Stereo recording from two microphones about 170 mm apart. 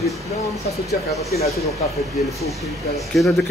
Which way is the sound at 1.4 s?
40° left (ahead or behind).